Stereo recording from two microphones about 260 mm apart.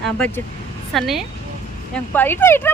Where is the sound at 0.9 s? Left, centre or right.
Centre.